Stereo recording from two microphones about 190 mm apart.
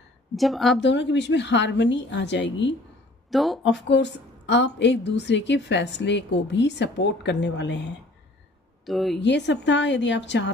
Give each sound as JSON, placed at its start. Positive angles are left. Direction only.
{"t": 0.4, "sound": "speech", "side_deg": 0}
{"t": 0.7, "sound": "a woman's voice", "side_deg": 65}
{"t": 3.3, "sound": "speech", "side_deg": 0}
{"t": 3.7, "sound": "a woman's voice", "side_deg": 70}
{"t": 8.8, "sound": "speech", "side_deg": 0}
{"t": 9.2, "sound": "a woman's voice", "side_deg": 65}